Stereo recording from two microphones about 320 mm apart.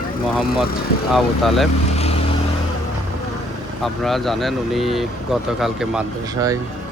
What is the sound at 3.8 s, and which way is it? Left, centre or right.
Speech, centre.